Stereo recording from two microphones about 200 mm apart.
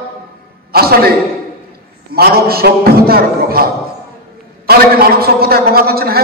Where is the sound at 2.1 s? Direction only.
50° right (ahead or behind).